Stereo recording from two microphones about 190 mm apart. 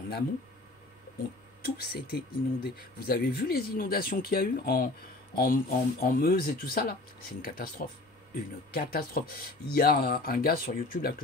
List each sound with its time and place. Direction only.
1.8 s speech: 60° left (ahead or behind)